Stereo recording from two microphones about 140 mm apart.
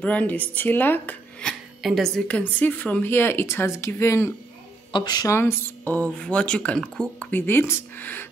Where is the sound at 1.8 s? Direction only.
Centre (ahead or behind).